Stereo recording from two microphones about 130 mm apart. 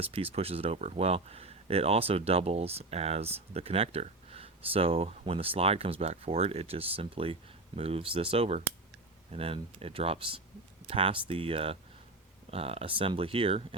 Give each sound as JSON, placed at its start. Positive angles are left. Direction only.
{"t": 0.0, "sound": "speech", "side_deg": -45}